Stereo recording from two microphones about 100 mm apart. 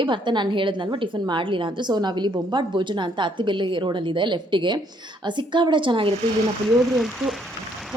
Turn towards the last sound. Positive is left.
turn(degrees=0)  # may be behind; listen again after turning